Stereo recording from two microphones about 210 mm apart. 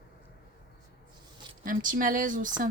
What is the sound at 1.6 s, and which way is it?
Speech, 40° right (ahead or behind).